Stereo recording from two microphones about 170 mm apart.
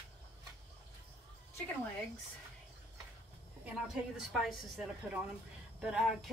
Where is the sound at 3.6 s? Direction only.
5° right (ahead or behind).